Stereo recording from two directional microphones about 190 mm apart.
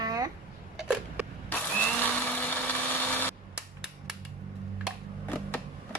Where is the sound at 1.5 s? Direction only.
10° left (ahead or behind).